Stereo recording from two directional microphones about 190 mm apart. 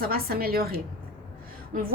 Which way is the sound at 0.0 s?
50° right (ahead or behind).